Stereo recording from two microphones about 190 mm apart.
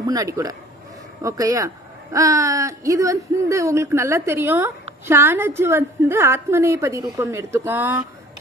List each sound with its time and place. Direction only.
0.0 s speech: 20° right (ahead or behind)